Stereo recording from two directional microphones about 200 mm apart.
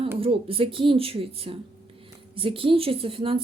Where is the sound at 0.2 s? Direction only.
25° right (ahead or behind).